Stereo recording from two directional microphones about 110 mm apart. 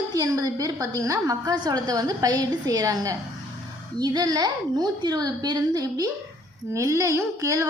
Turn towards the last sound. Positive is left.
turn(degrees=-30)  # may be behind; listen again after turning